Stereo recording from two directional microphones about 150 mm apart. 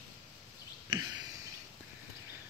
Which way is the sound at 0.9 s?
25° right (ahead or behind).